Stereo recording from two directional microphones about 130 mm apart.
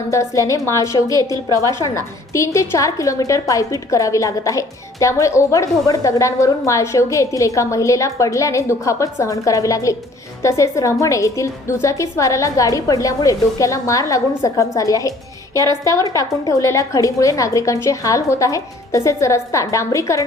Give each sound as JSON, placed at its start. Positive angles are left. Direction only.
{"t": 0.1, "sound": "a woman's voice", "side_deg": 25}
{"t": 2.3, "sound": "a woman's voice", "side_deg": 25}